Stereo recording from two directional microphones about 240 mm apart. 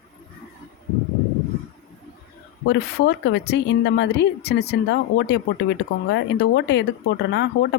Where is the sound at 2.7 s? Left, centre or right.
Left.